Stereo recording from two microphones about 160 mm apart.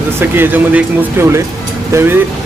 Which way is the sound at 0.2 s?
15° right (ahead or behind).